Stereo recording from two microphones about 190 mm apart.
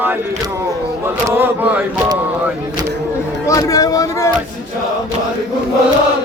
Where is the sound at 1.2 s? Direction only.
10° right (ahead or behind).